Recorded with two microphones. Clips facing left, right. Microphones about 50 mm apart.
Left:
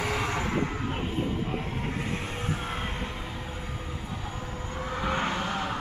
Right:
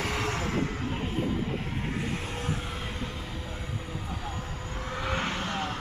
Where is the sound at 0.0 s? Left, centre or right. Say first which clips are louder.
Left 1 dB; centre.